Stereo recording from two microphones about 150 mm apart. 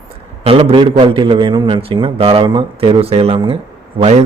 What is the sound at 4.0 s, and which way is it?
Speech, 45° right (ahead or behind).